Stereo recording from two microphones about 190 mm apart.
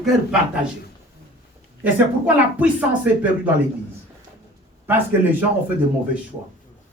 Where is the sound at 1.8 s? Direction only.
5° right (ahead or behind).